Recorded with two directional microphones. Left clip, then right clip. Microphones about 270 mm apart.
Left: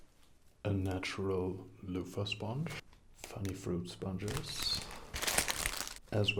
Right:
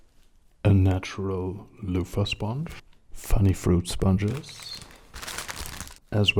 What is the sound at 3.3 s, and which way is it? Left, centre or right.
Speech, right.